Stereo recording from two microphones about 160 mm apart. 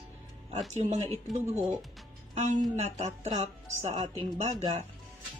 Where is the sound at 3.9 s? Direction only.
30° right (ahead or behind).